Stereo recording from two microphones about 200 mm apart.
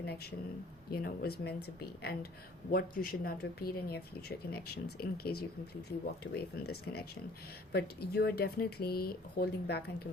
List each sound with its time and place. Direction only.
0.0 s speech: 50° left (ahead or behind)